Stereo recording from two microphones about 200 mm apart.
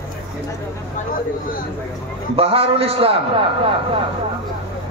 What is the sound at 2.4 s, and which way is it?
A man's voice, 30° right (ahead or behind).